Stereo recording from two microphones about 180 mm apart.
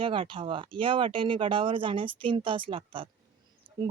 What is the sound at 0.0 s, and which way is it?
Speech, 30° right (ahead or behind).